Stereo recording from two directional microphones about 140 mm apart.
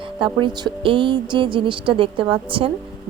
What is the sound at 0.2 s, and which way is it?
Speech, 35° right (ahead or behind).